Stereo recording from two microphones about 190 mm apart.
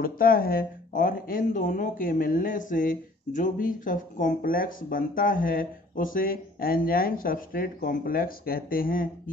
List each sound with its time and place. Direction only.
0.0 s speech: 50° left (ahead or behind)